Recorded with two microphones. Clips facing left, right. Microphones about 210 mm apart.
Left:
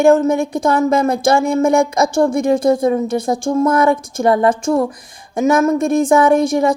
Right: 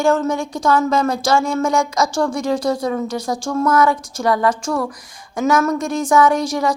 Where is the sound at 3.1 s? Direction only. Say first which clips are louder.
Left 5 dB; 25° left (ahead or behind).